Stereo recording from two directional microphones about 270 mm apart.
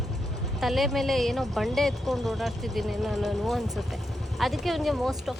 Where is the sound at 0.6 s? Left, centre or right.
Centre.